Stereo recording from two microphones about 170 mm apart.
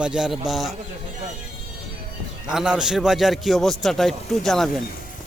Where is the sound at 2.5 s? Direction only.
5° right (ahead or behind).